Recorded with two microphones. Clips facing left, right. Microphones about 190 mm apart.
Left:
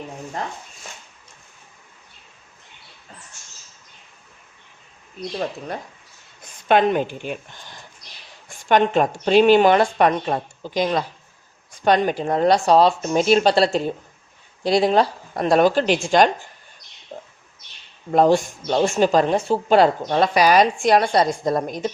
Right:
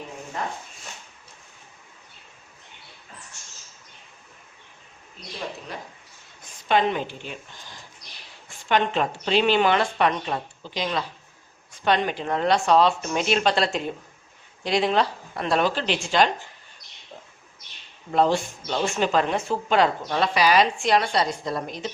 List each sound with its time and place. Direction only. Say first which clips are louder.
6.7 s speech: left 5 dB; 55° left (ahead or behind)
8.4 s speech: left 5 dB; 45° left (ahead or behind)
17.1 s bird: left 7 dB; 45° left (ahead or behind)
18.1 s speech: left 5 dB; 45° left (ahead or behind)